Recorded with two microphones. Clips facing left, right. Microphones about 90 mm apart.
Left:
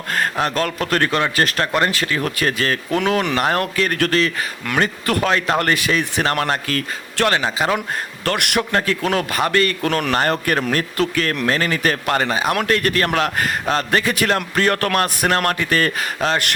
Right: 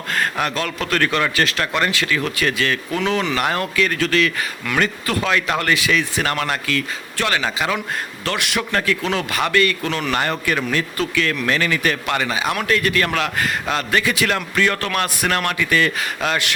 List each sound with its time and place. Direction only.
0.1 s speech: 35° left (ahead or behind)
2.9 s a man's voice: 50° left (ahead or behind)
3.3 s a man's voice: 35° left (ahead or behind); by 6.2 s 50° left (ahead or behind)
6.2 s speech: 35° left (ahead or behind)
8.2 s a man's voice: 50° left (ahead or behind)